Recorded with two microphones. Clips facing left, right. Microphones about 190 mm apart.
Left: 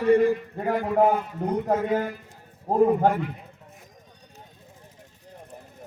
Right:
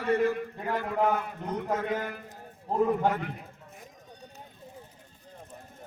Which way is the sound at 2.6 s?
45° left (ahead or behind).